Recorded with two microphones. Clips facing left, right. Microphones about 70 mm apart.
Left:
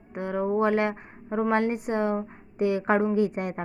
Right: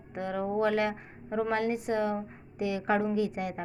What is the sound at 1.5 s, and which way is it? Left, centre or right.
A woman's voice, left.